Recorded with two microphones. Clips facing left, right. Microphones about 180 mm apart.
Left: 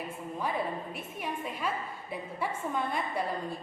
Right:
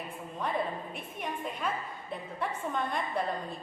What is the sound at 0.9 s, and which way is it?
A woman's voice, 5° left (ahead or behind).